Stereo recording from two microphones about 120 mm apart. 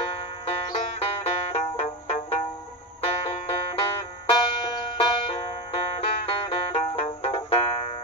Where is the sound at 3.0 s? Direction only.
50° left (ahead or behind).